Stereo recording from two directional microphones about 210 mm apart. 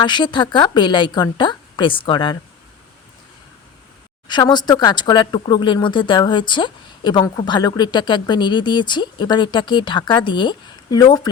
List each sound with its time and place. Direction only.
0.0 s speech: 20° left (ahead or behind)
4.3 s speech: 20° left (ahead or behind)